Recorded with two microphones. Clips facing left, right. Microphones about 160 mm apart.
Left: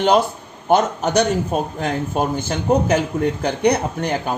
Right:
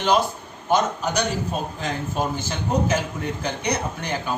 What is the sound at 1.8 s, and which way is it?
Speech, 50° left (ahead or behind).